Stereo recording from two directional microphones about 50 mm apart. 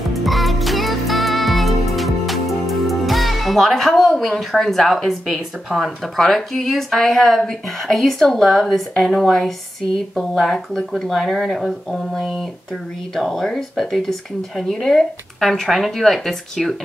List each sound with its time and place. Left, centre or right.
0.1 s music: centre
4.1 s speech: centre
6.1 s speech: centre